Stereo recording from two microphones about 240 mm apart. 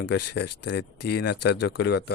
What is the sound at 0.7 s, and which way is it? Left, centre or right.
Speech, left.